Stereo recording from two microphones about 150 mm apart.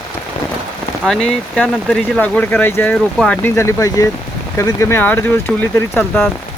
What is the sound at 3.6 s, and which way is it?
Speech, 20° left (ahead or behind).